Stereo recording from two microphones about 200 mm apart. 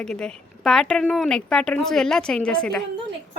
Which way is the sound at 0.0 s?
5° left (ahead or behind).